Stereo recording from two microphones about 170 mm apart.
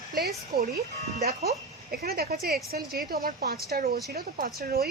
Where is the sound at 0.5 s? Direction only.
60° right (ahead or behind).